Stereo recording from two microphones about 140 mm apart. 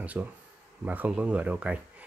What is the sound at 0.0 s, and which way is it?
Speech, 10° right (ahead or behind).